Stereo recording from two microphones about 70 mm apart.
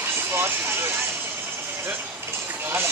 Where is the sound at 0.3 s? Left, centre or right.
Right.